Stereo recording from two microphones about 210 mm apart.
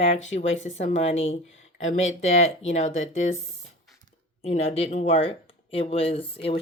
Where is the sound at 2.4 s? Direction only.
65° left (ahead or behind).